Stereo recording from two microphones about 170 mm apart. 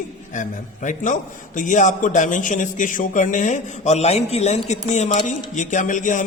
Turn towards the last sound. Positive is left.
turn(degrees=50)  # may be behind; listen again after turning